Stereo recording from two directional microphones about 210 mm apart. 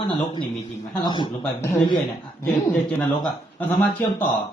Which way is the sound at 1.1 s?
20° left (ahead or behind).